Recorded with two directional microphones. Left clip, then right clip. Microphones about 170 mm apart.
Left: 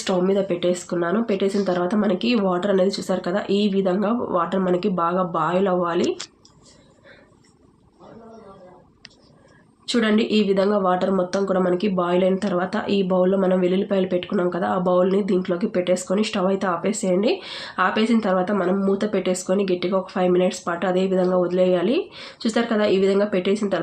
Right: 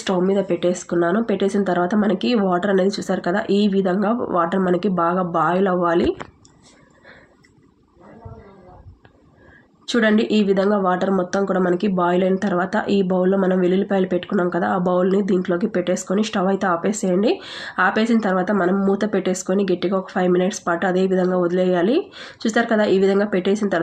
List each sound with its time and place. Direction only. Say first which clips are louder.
0.0 s speech: right 1 dB; 15° right (ahead or behind)
9.8 s speech: right 3 dB; 15° right (ahead or behind)